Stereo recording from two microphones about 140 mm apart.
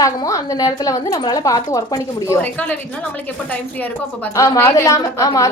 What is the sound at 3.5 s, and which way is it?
A woman's voice, 10° left (ahead or behind).